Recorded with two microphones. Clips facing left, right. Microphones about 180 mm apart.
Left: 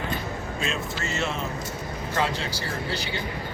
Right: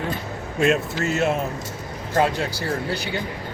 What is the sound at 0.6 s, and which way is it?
Speech, 65° right (ahead or behind).